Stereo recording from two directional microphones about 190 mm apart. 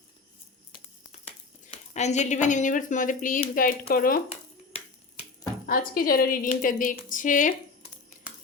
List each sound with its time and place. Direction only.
1.7 s a woman's voice: 35° left (ahead or behind)
4.3 s finger snapping: 35° left (ahead or behind)
5.6 s a woman's voice: 50° left (ahead or behind)